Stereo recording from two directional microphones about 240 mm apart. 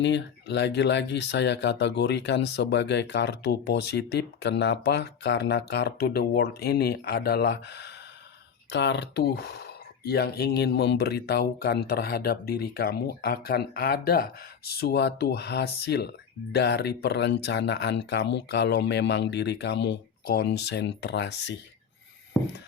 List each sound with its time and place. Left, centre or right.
0.0 s speech: left